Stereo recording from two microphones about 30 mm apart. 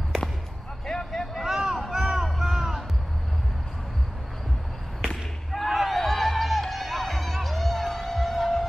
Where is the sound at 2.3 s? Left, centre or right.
Centre.